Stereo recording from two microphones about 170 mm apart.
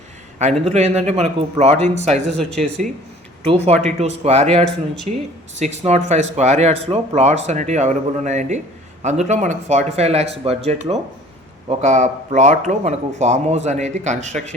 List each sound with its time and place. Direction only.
0.7 s speech: 40° right (ahead or behind)
2.4 s speech: 5° left (ahead or behind)
3.4 s a man's voice: 35° right (ahead or behind)